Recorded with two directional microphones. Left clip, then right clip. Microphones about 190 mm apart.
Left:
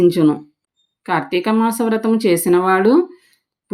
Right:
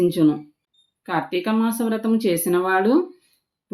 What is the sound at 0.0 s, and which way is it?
Speech, 40° left (ahead or behind).